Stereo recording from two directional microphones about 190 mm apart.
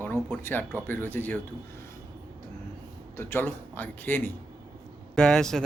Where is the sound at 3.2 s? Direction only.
10° left (ahead or behind).